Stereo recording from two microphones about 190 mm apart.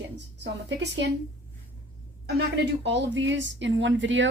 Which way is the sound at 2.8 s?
65° right (ahead or behind).